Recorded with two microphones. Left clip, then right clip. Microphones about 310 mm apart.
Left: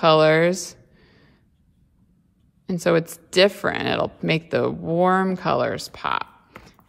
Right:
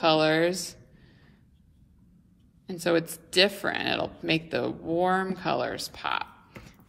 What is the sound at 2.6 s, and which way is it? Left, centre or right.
Speech, left.